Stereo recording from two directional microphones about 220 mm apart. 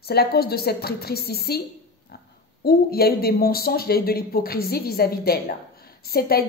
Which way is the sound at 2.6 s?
45° left (ahead or behind).